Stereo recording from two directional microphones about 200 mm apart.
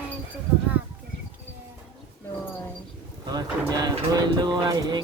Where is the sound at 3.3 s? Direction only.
20° right (ahead or behind).